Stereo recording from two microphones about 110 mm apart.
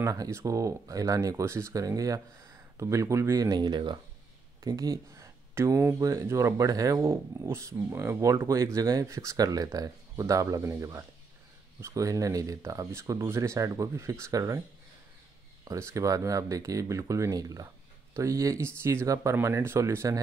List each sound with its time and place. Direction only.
0.0 s speech: 30° right (ahead or behind)
4.6 s speech: 35° right (ahead or behind)
15.6 s speech: 30° right (ahead or behind)